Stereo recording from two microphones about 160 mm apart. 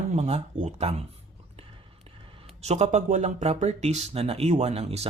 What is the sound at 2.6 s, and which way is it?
Speech, 45° right (ahead or behind).